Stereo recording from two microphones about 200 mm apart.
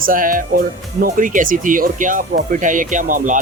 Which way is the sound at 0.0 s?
45° right (ahead or behind).